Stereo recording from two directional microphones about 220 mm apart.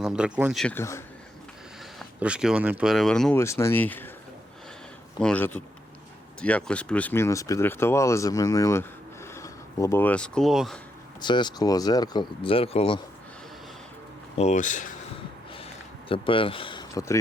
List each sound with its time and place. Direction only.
0.0 s speech: 5° right (ahead or behind); by 1.0 s 10° left (ahead or behind)
2.0 s speech: 5° right (ahead or behind)
5.2 s speech: 5° left (ahead or behind)
11.2 s speech: 20° left (ahead or behind)
14.3 s speech: 30° left (ahead or behind)
15.5 s a sound: 25° left (ahead or behind)